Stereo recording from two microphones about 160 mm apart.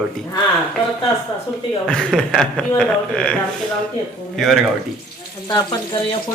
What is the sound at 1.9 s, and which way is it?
A man's voice, 5° left (ahead or behind).